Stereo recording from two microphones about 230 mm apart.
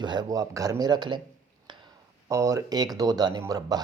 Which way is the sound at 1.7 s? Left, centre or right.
Centre.